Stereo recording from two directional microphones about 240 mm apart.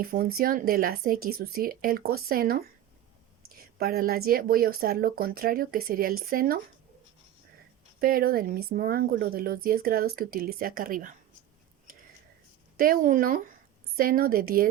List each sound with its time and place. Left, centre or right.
0.0 s speech: right
7.9 s speech: right
12.7 s speech: right